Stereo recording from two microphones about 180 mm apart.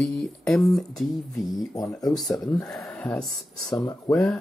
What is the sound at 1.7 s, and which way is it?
Speech, 20° left (ahead or behind).